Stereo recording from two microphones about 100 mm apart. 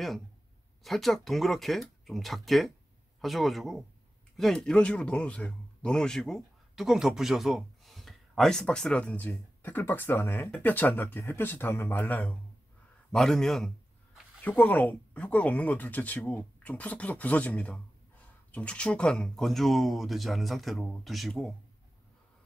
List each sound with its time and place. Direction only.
0.8 s speech: centre (ahead or behind)
13.1 s speech: 5° left (ahead or behind)
14.4 s speech: 15° left (ahead or behind)